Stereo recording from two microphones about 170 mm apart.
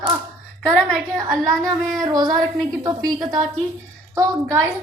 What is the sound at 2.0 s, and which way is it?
A woman's voice, 25° right (ahead or behind).